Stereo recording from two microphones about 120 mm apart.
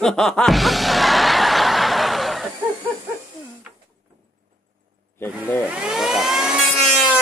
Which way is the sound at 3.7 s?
10° right (ahead or behind).